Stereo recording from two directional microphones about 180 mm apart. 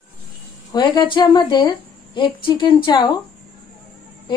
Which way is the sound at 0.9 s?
25° left (ahead or behind).